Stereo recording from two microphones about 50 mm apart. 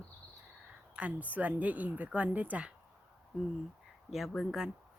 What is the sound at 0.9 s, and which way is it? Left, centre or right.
Speech, right.